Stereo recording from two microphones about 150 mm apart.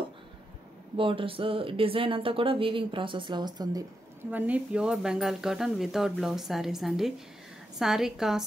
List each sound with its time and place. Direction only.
0.9 s speech: 35° right (ahead or behind)
4.2 s speech: 10° right (ahead or behind)